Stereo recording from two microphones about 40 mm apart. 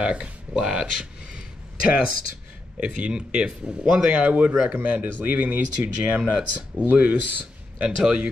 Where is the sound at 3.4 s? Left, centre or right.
Centre.